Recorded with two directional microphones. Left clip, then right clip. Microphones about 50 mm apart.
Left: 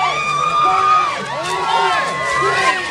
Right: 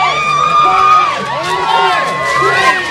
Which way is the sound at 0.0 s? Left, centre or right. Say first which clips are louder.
Right 5 dB; centre.